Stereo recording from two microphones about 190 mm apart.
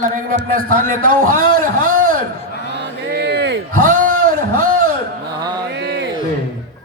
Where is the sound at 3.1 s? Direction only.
60° right (ahead or behind).